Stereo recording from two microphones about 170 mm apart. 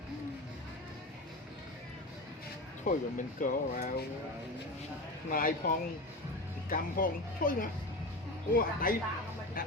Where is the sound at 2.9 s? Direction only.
50° left (ahead or behind).